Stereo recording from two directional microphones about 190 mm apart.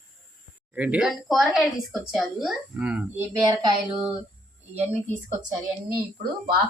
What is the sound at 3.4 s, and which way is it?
Child singing, 25° right (ahead or behind).